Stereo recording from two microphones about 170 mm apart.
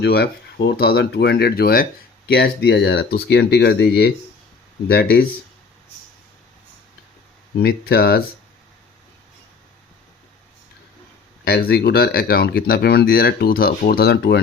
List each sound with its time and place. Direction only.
0.0 s speech: 70° left (ahead or behind)
7.6 s speech: 65° left (ahead or behind)
11.4 s speech: 65° left (ahead or behind)